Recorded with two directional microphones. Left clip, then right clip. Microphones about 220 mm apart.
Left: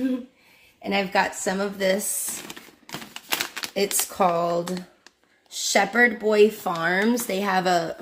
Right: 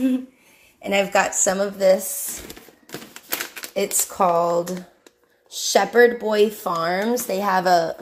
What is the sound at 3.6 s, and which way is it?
Speech, 10° left (ahead or behind).